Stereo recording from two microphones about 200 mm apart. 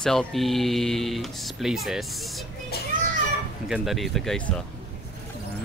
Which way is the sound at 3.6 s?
Centre (ahead or behind).